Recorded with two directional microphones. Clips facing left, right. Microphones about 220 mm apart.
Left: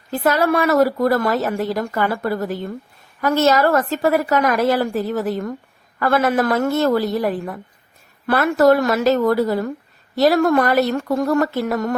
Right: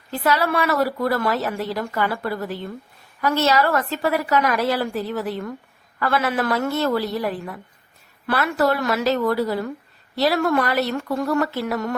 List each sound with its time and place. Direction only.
0.1 s a woman's voice: 45° left (ahead or behind)